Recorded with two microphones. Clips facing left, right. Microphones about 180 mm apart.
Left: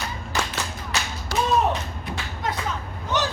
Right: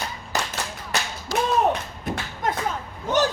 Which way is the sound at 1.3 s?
65° left (ahead or behind).